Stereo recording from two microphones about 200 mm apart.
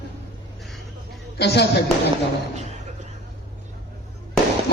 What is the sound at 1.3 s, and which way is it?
Speech, 55° left (ahead or behind).